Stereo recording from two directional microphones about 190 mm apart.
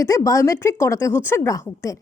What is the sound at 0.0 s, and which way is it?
Speech, 15° left (ahead or behind).